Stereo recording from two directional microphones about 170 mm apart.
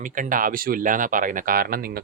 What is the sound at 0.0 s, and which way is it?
Speech, 50° right (ahead or behind).